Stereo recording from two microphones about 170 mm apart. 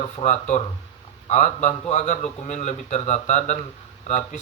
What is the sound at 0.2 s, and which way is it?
A man's voice, 45° left (ahead or behind).